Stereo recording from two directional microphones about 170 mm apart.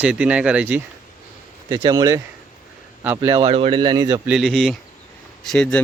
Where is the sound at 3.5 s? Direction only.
35° right (ahead or behind).